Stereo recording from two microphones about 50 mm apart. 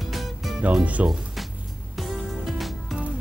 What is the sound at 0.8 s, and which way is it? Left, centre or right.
Speech, right.